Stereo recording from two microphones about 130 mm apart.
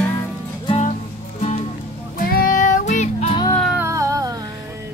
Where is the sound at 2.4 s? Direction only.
85° left; by 3.3 s 65° left (ahead or behind).